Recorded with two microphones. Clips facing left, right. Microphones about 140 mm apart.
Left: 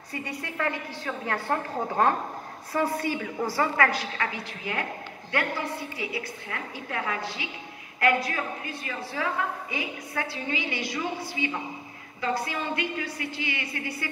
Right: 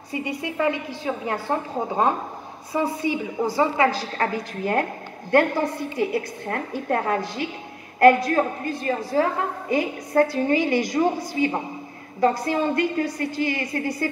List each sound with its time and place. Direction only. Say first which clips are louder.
0.1 s a woman's voice: right 7 dB; 15° right (ahead or behind)
3.9 s a woman's voice: right 6 dB; 40° right (ahead or behind)
8.3 s a woman's voice: right 10 dB; 40° right (ahead or behind)